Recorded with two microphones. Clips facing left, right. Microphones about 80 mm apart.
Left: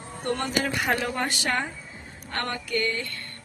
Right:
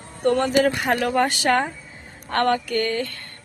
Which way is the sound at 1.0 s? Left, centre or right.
Right.